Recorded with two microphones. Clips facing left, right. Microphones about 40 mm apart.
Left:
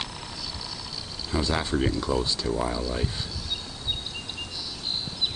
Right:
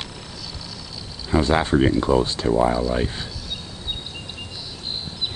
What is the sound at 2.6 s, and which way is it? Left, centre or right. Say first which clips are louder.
Speech: right 8 dB; right.